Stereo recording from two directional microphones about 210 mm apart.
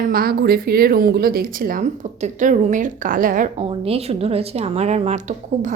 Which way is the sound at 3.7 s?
30° right (ahead or behind).